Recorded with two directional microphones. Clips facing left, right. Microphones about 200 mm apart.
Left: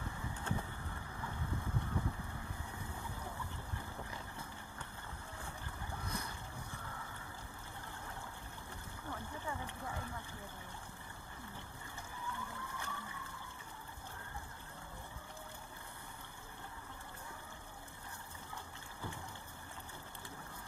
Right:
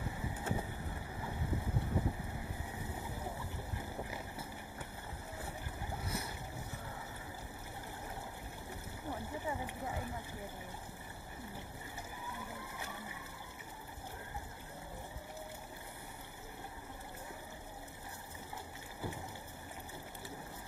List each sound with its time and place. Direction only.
0.0 s vehicle: 20° right (ahead or behind)
3.0 s boat: 15° right (ahead or behind)
9.0 s a sound: 15° right (ahead or behind)
12.3 s vehicle: 15° right (ahead or behind)